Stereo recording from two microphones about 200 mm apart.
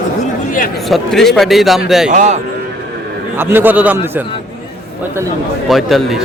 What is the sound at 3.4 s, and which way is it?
Speech, 10° right (ahead or behind).